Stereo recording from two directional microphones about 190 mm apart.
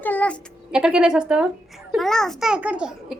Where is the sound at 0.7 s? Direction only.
5° right (ahead or behind).